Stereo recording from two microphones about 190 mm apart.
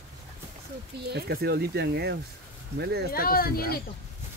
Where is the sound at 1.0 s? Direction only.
55° right (ahead or behind).